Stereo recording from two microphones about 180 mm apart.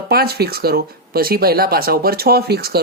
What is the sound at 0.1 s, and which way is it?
Speech, 60° right (ahead or behind).